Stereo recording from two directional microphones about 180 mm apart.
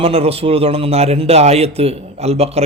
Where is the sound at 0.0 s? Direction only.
35° right (ahead or behind).